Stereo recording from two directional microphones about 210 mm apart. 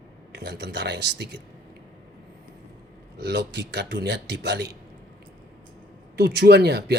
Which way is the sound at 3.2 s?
50° right (ahead or behind).